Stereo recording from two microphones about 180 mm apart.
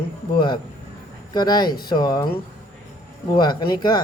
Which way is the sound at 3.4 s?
25° left (ahead or behind).